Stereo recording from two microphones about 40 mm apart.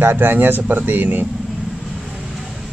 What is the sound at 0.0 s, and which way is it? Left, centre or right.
Speech, right.